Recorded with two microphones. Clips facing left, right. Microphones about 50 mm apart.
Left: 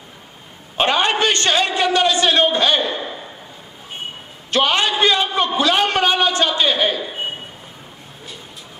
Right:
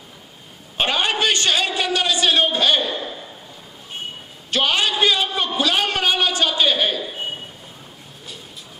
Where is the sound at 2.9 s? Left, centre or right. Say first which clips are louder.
Left 2 dB; centre.